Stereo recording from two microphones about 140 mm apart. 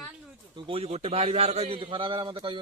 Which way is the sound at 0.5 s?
45° right (ahead or behind).